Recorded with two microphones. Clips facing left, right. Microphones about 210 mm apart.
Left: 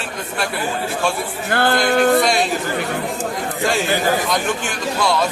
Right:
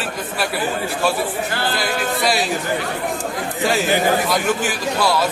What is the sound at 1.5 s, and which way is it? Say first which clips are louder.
Music: left 6 dB; 55° left (ahead or behind).